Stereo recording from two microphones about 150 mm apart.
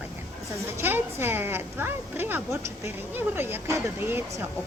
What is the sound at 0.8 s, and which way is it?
Speech, 15° right (ahead or behind).